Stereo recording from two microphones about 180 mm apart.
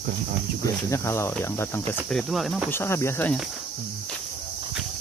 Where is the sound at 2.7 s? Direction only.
15° left (ahead or behind).